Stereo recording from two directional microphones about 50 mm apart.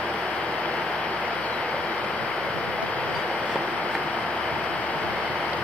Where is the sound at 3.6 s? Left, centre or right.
Left.